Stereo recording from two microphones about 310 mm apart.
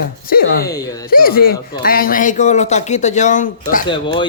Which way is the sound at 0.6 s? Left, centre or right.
Centre.